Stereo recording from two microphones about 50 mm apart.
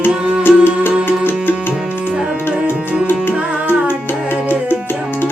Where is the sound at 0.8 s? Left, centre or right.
Left.